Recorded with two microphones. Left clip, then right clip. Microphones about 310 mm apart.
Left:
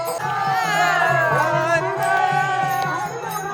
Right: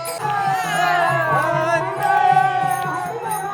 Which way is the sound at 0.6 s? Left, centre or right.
Left.